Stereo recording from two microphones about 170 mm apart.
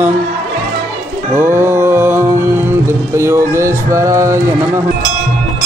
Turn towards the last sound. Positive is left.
turn(degrees=-15)  # may be behind; listen again after turning